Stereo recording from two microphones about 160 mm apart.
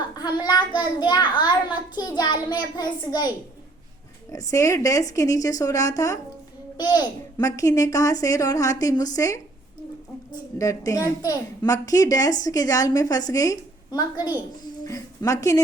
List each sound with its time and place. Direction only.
0.1 s a woman's voice: 25° left (ahead or behind)
10.6 s a woman's voice: 20° left (ahead or behind)